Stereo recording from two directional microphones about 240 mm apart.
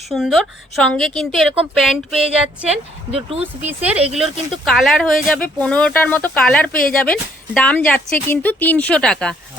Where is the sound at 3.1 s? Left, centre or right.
Right.